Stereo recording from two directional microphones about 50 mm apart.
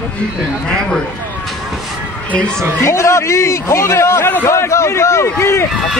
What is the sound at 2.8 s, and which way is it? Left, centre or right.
A man's voice, left.